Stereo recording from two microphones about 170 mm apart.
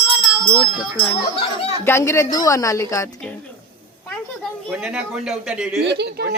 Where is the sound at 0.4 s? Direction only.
25° left (ahead or behind).